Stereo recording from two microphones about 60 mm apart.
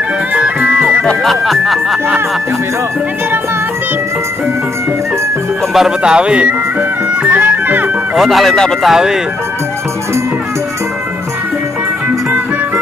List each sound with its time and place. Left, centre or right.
0.3 s music: right
1.2 s speech: centre
5.7 s speech: centre
6.0 s speech: centre
6.8 s music: right
8.2 s speech: centre